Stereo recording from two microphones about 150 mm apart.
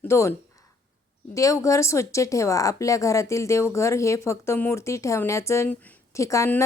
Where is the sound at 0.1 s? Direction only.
20° left (ahead or behind).